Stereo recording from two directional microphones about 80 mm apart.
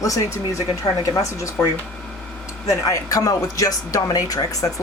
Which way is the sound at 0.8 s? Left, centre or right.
Left.